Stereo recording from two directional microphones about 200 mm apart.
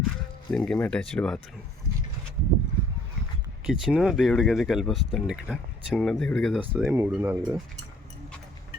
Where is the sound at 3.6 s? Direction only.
5° right (ahead or behind).